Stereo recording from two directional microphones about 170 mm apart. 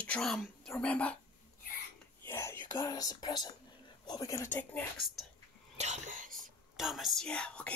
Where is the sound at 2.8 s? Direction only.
20° left (ahead or behind).